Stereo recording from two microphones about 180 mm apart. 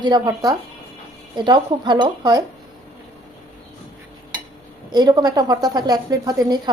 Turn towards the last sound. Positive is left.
turn(degrees=-20)  # may be behind; listen again after turning